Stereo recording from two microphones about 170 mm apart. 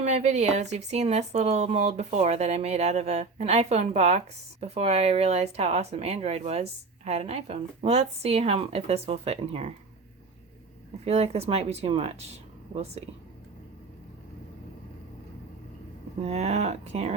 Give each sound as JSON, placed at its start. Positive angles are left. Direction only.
{"t": 0.0, "sound": "speech", "side_deg": -40}
{"t": 11.0, "sound": "speech", "side_deg": -40}
{"t": 16.2, "sound": "speech", "side_deg": -40}